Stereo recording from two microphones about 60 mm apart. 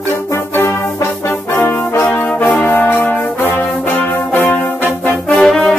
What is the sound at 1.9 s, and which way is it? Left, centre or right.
Brass instrument, left.